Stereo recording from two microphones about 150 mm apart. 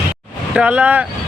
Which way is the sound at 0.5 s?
5° right (ahead or behind).